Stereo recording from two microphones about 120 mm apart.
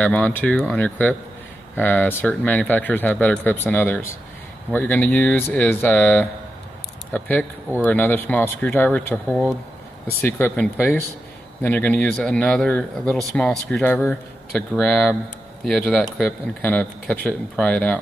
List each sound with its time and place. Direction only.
0.0 s speech: 10° left (ahead or behind)
11.6 s a man's voice: 15° left (ahead or behind)
16.6 s speech: 15° left (ahead or behind)